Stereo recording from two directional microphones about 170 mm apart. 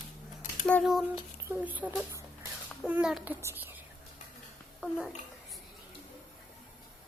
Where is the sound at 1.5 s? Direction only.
10° right (ahead or behind).